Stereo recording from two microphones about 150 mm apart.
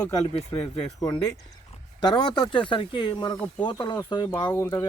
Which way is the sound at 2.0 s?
30° left (ahead or behind).